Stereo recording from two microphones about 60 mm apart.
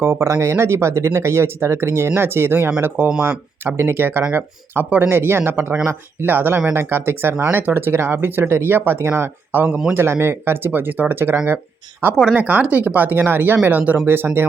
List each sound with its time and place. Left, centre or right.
0.0 s speech: right
0.3 s speech: right
9.6 s speech: centre
9.9 s speech: right
12.1 s speech: centre
12.4 s speech: right